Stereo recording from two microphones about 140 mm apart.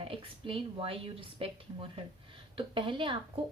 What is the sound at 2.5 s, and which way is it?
Speech, 40° right (ahead or behind).